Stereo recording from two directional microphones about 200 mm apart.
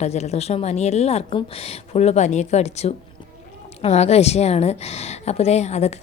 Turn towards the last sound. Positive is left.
turn(degrees=35)  # may be behind; listen again after turning